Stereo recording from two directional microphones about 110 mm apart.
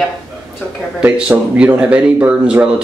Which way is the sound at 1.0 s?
10° right (ahead or behind).